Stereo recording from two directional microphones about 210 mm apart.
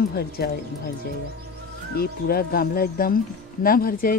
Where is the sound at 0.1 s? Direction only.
45° left (ahead or behind).